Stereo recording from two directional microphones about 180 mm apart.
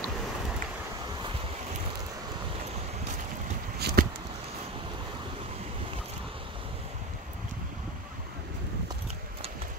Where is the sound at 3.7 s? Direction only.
60° right (ahead or behind).